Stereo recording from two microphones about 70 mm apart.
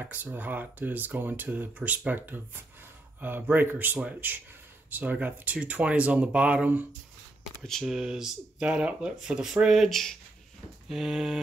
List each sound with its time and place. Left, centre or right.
0.0 s speech: right
7.8 s speech: centre
10.9 s a sound: centre